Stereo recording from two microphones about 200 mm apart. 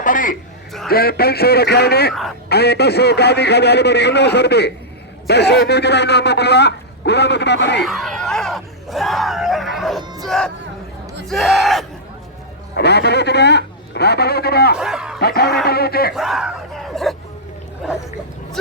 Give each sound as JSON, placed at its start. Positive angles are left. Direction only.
{"t": 0.0, "sound": "a sound", "side_deg": 40}
{"t": 0.9, "sound": "a man's voice", "side_deg": 50}
{"t": 7.9, "sound": "screaming", "side_deg": 0}
{"t": 10.0, "sound": "crowd", "side_deg": -20}
{"t": 10.2, "sound": "speech", "side_deg": 5}
{"t": 12.7, "sound": "speech", "side_deg": 55}
{"t": 14.8, "sound": "speech", "side_deg": -5}
{"t": 15.2, "sound": "a man's voice", "side_deg": 50}
{"t": 16.1, "sound": "a sound", "side_deg": 0}